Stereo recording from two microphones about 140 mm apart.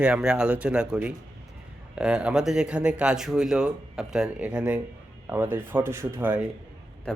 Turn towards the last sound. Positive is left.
turn(degrees=5)  # may be behind; listen again after turning